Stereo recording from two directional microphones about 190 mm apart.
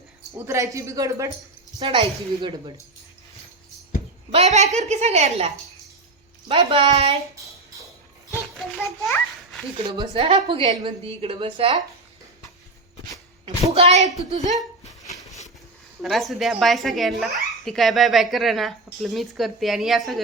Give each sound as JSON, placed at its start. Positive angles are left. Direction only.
{"t": 0.3, "sound": "speech", "side_deg": -15}
{"t": 1.8, "sound": "a woman's voice", "side_deg": -25}
{"t": 4.3, "sound": "a woman's voice", "side_deg": -35}
{"t": 8.5, "sound": "a sound", "side_deg": 0}
{"t": 9.8, "sound": "a woman's voice", "side_deg": -25}
{"t": 13.7, "sound": "a woman's voice", "side_deg": -35}
{"t": 14.5, "sound": "a sound", "side_deg": 0}
{"t": 16.0, "sound": "speech", "side_deg": 0}